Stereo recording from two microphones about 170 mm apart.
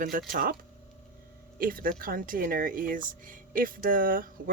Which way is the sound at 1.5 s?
55° right (ahead or behind).